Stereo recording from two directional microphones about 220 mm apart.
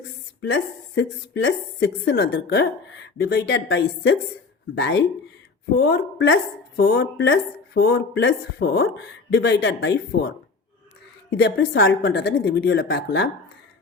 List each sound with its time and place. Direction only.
0.5 s a woman's voice: 60° left (ahead or behind)